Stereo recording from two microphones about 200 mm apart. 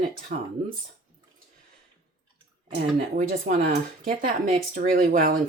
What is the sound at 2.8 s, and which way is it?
Speech, 40° right (ahead or behind).